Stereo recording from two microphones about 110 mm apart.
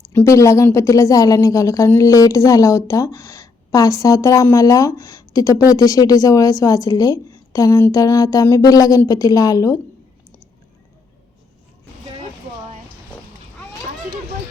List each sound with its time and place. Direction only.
0.1 s a woman's voice: 25° left (ahead or behind)